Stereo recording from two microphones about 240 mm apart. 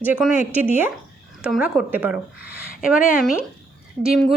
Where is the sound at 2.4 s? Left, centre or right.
Left.